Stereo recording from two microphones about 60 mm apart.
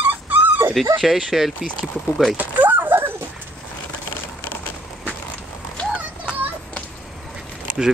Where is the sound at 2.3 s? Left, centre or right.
Right.